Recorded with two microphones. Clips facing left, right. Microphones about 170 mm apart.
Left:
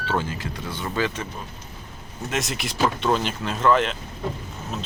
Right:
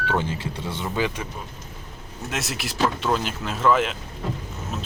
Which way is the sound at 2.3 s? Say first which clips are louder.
Left 2 dB; centre (ahead or behind).